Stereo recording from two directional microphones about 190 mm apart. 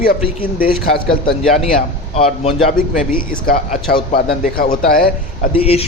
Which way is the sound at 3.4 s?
50° left (ahead or behind).